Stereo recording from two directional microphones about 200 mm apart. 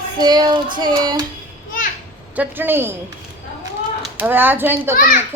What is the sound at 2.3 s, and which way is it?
Speech, 10° right (ahead or behind).